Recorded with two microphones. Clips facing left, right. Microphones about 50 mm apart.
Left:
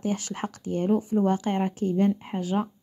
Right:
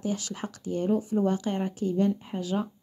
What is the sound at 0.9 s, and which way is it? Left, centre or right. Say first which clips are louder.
Speech: left 2 dB; left.